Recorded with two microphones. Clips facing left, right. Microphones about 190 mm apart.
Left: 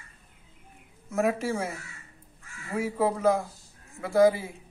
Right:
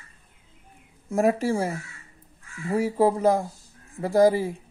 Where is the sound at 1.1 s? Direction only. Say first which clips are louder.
Right 4 dB; 35° right (ahead or behind).